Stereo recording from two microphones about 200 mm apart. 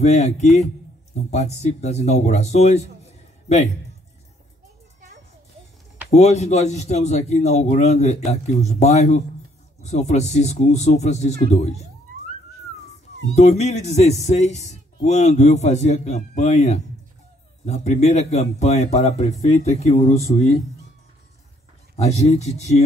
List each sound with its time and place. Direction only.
0.0 s a man's voice: 35° left (ahead or behind)
6.0 s a man's voice: 35° left (ahead or behind)
13.3 s a man's voice: 35° left (ahead or behind)
21.9 s a man's voice: 30° left (ahead or behind)